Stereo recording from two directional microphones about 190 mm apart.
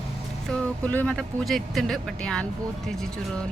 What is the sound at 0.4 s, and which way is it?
Speech, 5° left (ahead or behind).